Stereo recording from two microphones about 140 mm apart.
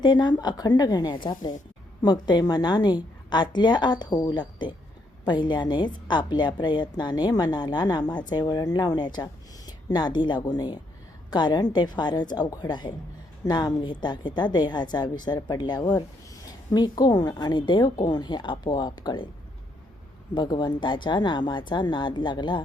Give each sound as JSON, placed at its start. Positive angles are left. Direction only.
{"t": 0.0, "sound": "a woman's voice", "side_deg": 30}
{"t": 20.3, "sound": "a woman's voice", "side_deg": 30}